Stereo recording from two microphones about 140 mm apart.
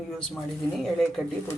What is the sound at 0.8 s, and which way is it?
Speech, centre (ahead or behind).